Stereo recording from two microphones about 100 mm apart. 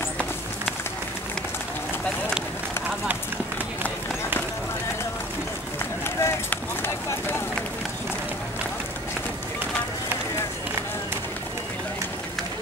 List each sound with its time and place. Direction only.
6.0 s run: 25° left (ahead or behind)